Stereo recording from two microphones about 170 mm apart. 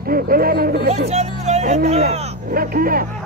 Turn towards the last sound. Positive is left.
turn(degrees=-55)  # may be behind; listen again after turning